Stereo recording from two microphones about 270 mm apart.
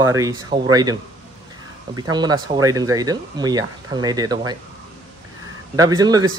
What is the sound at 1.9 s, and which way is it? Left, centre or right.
Speech, centre.